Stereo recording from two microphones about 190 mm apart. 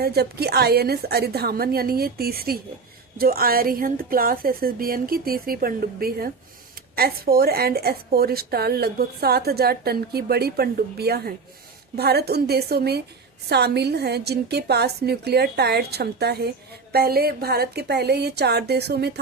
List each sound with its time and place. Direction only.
0.0 s a woman's voice: 55° right (ahead or behind)